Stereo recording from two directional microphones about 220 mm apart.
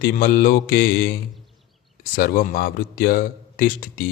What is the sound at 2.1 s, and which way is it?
Speech, 40° left (ahead or behind).